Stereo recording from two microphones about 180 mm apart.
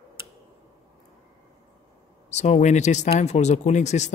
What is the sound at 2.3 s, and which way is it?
Speech, 40° left (ahead or behind).